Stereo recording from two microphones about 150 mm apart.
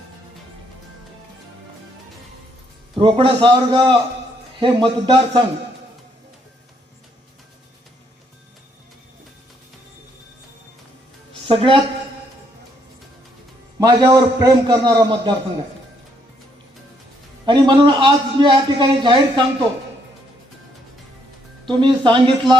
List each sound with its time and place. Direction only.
2.9 s a man's voice: 35° right (ahead or behind)
11.4 s a woman's voice: 35° right (ahead or behind)
13.7 s a man's voice: 25° right (ahead or behind)
17.4 s a man's voice: 30° right (ahead or behind)
21.7 s a man's voice: 30° right (ahead or behind)